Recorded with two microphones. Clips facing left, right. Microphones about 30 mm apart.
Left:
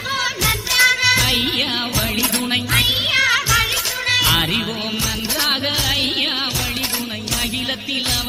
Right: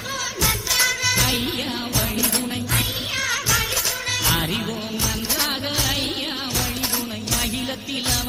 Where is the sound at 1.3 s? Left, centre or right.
Left.